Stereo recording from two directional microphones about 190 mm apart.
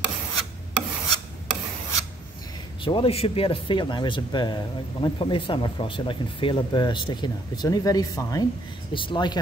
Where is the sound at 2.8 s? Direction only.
25° left (ahead or behind).